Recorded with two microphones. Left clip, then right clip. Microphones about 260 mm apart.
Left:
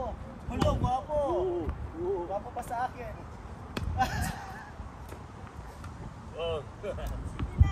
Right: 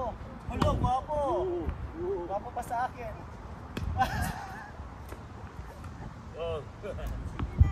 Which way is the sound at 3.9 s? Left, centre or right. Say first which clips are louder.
Right 1 dB; centre.